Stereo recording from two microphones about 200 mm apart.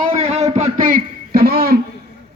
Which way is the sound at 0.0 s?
35° right (ahead or behind).